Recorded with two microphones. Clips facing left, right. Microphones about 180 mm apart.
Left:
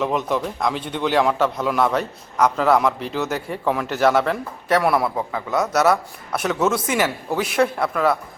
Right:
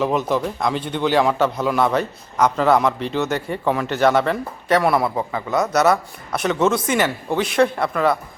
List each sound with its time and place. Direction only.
0.0 s a man's voice: centre (ahead or behind)